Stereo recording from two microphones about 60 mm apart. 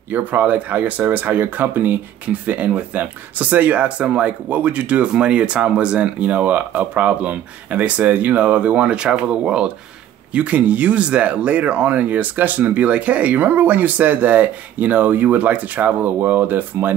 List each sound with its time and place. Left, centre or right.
0.1 s speech: right